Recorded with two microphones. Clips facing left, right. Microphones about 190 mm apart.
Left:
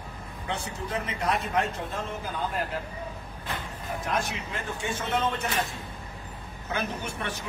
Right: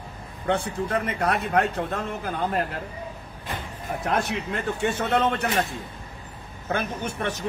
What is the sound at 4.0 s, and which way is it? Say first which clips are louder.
A man's voice: right 5 dB; 65° right (ahead or behind).